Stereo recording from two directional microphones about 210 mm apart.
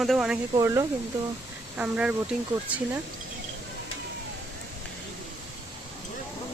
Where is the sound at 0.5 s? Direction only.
15° right (ahead or behind).